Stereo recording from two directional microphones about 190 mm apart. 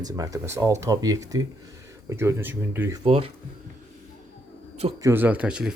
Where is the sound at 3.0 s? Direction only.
30° right (ahead or behind).